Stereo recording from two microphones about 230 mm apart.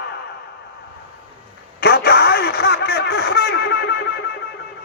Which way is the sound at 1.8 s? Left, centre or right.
Left.